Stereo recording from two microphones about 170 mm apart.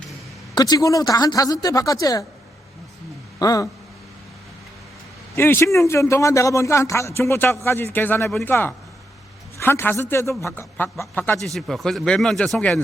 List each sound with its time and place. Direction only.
0.5 s speech: 25° left (ahead or behind)
3.3 s speech: 20° left (ahead or behind)
5.4 s a man's voice: 15° left (ahead or behind)